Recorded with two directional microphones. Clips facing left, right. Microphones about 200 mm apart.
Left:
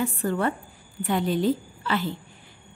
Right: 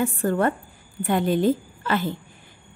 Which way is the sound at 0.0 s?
50° right (ahead or behind).